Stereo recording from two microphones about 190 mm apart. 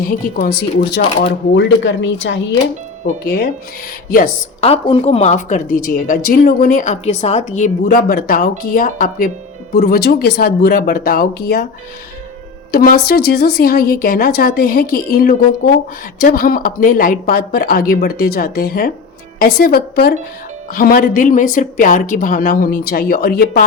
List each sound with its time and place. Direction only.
0.3 s speech: 50° left (ahead or behind); by 2.4 s 70° left (ahead or behind)
4.6 s speech: 30° left (ahead or behind); by 11.6 s 55° left (ahead or behind)
12.7 s a woman's voice: 50° left (ahead or behind)